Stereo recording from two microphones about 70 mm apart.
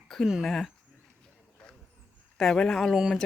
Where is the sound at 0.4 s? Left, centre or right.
Centre.